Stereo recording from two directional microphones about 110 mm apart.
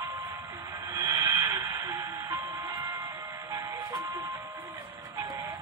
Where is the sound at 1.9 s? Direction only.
25° right (ahead or behind).